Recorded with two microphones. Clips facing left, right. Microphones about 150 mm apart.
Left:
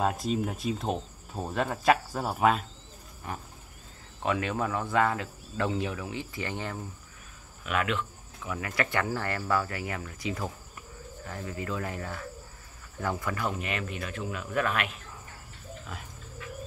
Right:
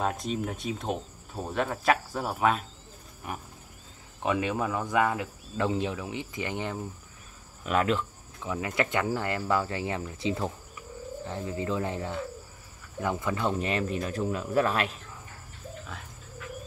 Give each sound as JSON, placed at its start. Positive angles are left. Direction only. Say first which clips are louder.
{"t": 0.0, "sound": "speech", "louder": "left 2 dB", "side_deg": 0}
{"t": 3.3, "sound": "speech", "louder": "right 1 dB", "side_deg": -10}
{"t": 7.6, "sound": "speech", "louder": "right 4 dB", "side_deg": -35}